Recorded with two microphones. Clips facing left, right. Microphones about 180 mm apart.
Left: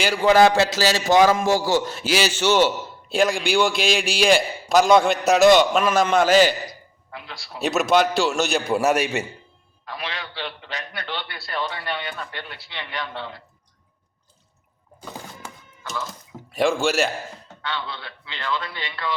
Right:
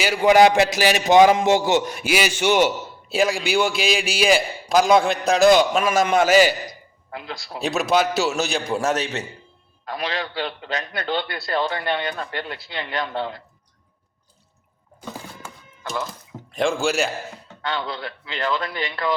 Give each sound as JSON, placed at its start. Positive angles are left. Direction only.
{"t": 0.0, "sound": "a man's voice", "side_deg": -10}
{"t": 7.6, "sound": "a man's voice", "side_deg": 0}
{"t": 9.9, "sound": "a man's voice", "side_deg": -40}
{"t": 16.6, "sound": "a man's voice", "side_deg": 0}
{"t": 17.6, "sound": "speech", "side_deg": -45}